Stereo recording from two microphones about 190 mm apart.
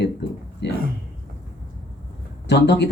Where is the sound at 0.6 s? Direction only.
65° left (ahead or behind).